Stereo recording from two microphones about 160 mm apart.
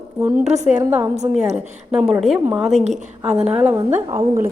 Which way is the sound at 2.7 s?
45° right (ahead or behind).